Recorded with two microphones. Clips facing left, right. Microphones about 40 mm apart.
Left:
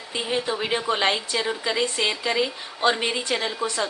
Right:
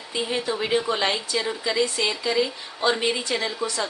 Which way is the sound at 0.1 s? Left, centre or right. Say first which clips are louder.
Even; centre.